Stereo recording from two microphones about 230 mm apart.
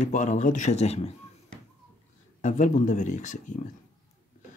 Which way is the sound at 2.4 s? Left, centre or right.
Left.